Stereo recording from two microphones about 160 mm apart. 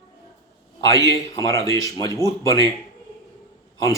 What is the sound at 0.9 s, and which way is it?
Speech, 20° left (ahead or behind).